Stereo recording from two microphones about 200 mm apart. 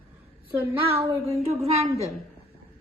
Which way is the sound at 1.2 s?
30° right (ahead or behind).